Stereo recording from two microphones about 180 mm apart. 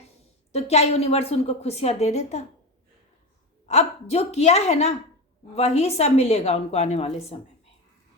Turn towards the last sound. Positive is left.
turn(degrees=35)  # may be behind; listen again after turning